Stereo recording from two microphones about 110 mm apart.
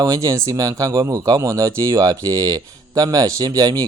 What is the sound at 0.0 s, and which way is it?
Speech, 30° right (ahead or behind).